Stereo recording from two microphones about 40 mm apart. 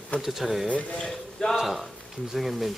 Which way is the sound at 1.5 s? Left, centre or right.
Centre.